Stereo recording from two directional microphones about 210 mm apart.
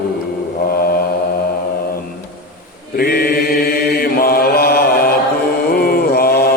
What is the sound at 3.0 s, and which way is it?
Mantra, 50° left (ahead or behind).